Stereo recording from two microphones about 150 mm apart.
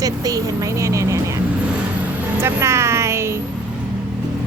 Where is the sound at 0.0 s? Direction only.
25° right (ahead or behind).